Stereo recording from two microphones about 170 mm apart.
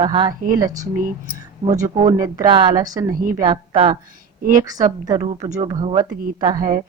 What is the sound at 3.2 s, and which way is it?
Speech, 55° right (ahead or behind).